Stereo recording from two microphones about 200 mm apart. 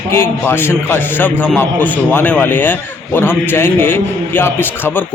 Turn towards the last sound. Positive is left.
turn(degrees=10)  # may be behind; listen again after turning